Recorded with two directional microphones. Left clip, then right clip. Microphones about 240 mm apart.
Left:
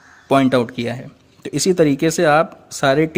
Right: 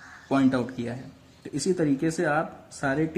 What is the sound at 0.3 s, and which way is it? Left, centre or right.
Speech, left.